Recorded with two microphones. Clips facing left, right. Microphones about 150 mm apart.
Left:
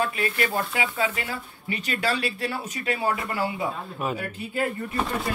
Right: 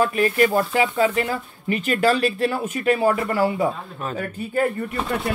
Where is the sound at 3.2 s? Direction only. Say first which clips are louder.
Right 7 dB; 35° right (ahead or behind).